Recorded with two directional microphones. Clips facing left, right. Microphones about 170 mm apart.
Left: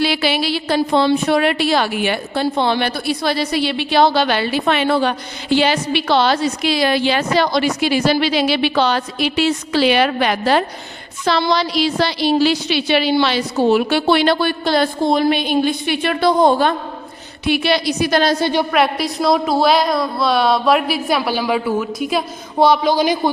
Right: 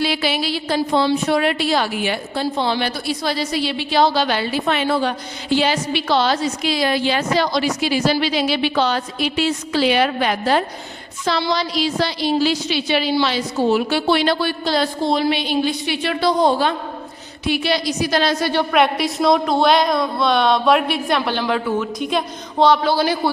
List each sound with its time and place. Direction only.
0.0 s a woman's voice: 75° left (ahead or behind)
11.3 s a woman's voice: 70° left (ahead or behind); by 16.7 s 50° left (ahead or behind)
17.4 s a woman's voice: 65° left (ahead or behind); by 18.3 s 50° left (ahead or behind)
18.7 s a woman's voice: centre (ahead or behind); by 23.3 s 15° left (ahead or behind)